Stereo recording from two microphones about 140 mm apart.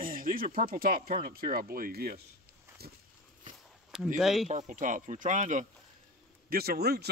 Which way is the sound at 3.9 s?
Centre (ahead or behind).